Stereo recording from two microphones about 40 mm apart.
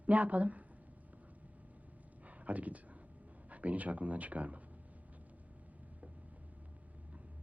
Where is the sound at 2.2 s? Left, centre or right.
Right.